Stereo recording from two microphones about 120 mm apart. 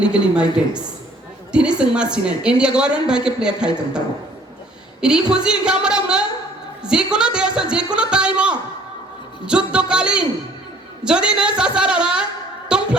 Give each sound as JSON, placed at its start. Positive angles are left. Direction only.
{"t": 0.0, "sound": "a woman's voice", "side_deg": -10}
{"t": 1.8, "sound": "a woman's voice", "side_deg": -10}
{"t": 4.9, "sound": "a woman's voice", "side_deg": -5}
{"t": 12.6, "sound": "a sound", "side_deg": -5}